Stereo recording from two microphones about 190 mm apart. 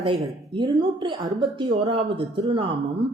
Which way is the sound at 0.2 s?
25° right (ahead or behind).